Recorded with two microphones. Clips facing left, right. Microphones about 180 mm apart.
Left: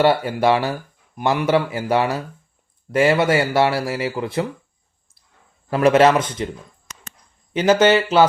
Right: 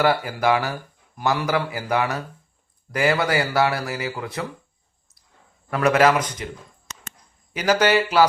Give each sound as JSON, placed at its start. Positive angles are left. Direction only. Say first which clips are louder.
{"t": 0.0, "sound": "speech", "louder": "left 4 dB", "side_deg": 25}
{"t": 5.7, "sound": "speech", "louder": "left 4 dB", "side_deg": 25}
{"t": 7.5, "sound": "speech", "louder": "left 4 dB", "side_deg": 25}